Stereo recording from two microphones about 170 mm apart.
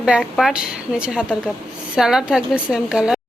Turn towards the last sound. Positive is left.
turn(degrees=-5)  # may be behind; listen again after turning